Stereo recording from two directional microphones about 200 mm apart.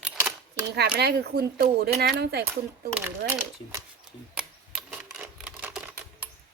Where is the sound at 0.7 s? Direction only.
55° right (ahead or behind).